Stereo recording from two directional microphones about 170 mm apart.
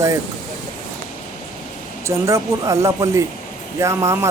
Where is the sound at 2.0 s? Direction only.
15° right (ahead or behind).